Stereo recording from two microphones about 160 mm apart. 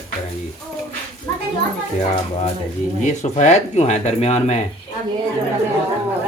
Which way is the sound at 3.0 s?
45° left (ahead or behind).